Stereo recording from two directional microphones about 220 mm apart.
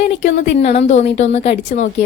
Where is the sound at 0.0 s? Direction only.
30° left (ahead or behind).